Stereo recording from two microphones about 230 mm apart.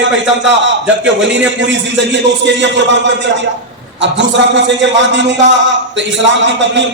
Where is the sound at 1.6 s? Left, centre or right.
Right.